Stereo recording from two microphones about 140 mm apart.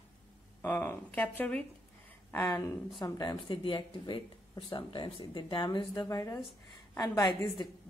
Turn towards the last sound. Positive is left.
turn(degrees=30)  # may be behind; listen again after turning